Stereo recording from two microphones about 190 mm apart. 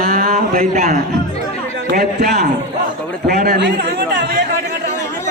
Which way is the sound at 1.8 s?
55° right (ahead or behind).